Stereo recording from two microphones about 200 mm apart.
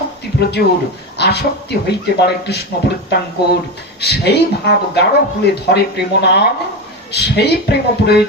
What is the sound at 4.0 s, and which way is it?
Speech, 55° left (ahead or behind).